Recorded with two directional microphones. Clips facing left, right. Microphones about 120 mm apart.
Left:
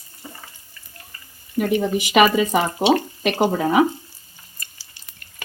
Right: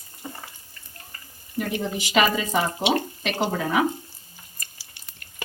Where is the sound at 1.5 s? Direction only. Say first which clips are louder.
Left 7 dB; 55° left (ahead or behind).